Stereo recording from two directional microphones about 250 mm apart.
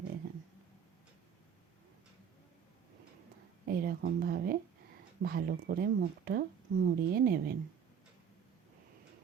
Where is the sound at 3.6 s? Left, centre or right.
Right.